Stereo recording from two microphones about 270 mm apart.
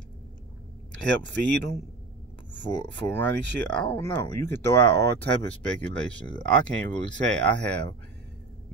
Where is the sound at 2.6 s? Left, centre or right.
Centre.